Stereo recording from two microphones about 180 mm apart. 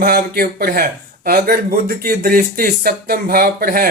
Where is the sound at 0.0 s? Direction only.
55° right (ahead or behind).